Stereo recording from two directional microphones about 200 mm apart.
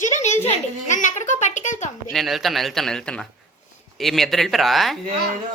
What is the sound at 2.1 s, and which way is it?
Speech, centre (ahead or behind).